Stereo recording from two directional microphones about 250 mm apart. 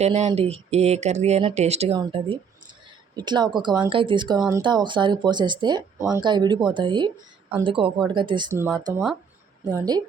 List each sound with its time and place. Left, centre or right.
0.0 s speech: right